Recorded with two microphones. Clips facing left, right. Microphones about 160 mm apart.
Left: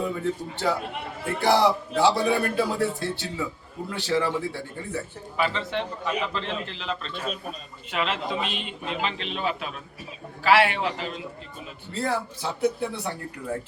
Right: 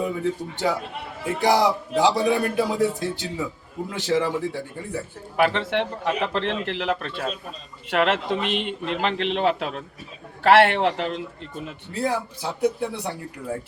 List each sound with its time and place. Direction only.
0.0 s speech: 15° right (ahead or behind)
5.4 s a man's voice: 70° right (ahead or behind)
11.9 s speech: 15° right (ahead or behind)